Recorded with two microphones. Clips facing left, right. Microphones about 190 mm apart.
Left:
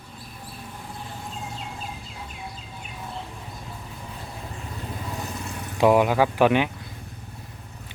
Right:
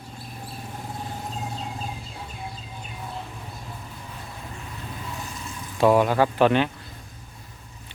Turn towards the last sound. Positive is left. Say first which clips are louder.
# even
turn(degrees=10)  # may be behind; listen again after turning